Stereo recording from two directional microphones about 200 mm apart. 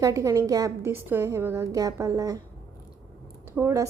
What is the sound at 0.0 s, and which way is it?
A woman's voice, 15° right (ahead or behind).